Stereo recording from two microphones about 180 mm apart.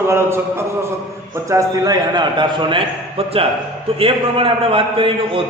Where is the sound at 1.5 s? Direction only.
20° right (ahead or behind).